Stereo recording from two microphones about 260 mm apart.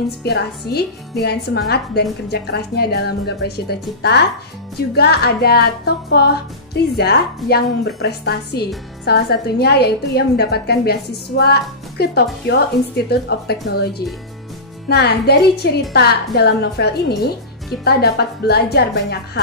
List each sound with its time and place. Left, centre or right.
0.2 s a woman's voice: left